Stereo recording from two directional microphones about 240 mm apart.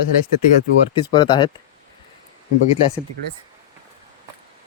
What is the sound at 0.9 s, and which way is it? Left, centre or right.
Speech, centre.